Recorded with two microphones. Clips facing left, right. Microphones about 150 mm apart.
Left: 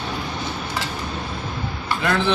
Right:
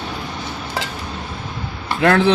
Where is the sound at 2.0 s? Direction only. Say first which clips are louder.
Right 7 dB; 65° right (ahead or behind).